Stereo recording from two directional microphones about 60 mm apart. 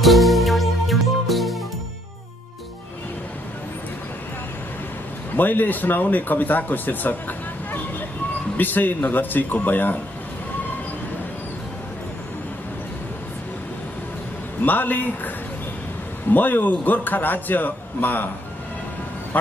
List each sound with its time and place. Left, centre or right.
0.0 s music: centre
5.3 s speech: left
14.6 s speech: left